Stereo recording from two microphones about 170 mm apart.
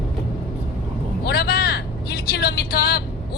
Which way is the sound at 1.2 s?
70° left (ahead or behind).